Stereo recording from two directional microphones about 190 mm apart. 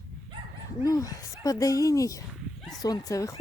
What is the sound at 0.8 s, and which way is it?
Speech, 20° left (ahead or behind).